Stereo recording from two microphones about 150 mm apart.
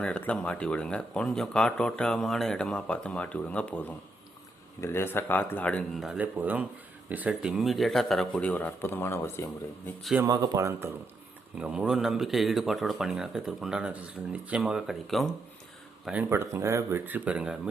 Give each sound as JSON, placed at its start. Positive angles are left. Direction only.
{"t": 0.0, "sound": "a man's voice", "side_deg": 10}
{"t": 10.2, "sound": "a man's voice", "side_deg": -25}
{"t": 16.3, "sound": "speech", "side_deg": -20}